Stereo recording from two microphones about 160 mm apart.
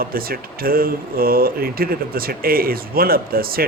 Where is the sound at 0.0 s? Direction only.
70° right (ahead or behind).